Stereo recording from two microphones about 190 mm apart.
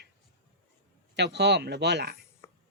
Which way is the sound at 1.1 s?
65° right (ahead or behind).